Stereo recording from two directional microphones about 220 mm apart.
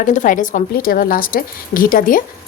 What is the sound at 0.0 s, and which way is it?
A woman's voice, 35° left (ahead or behind).